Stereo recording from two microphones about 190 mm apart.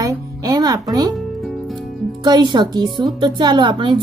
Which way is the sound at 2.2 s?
25° right (ahead or behind).